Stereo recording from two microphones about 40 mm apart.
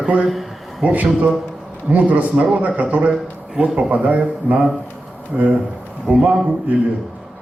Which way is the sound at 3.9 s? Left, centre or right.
Right.